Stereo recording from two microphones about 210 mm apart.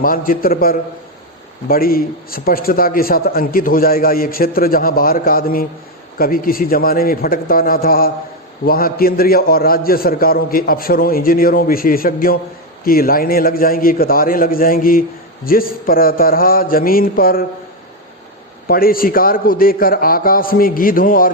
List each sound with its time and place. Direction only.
0.0 s a man's voice: 45° left (ahead or behind)
18.7 s a man's voice: 45° left (ahead or behind)